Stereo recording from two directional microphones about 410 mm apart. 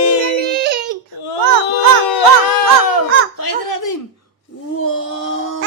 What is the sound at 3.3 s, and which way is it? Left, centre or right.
Giggle, left.